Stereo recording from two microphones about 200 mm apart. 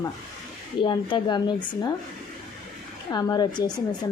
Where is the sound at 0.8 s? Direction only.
25° left (ahead or behind).